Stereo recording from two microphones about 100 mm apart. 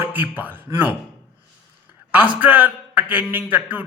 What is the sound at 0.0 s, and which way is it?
Speech, 15° right (ahead or behind).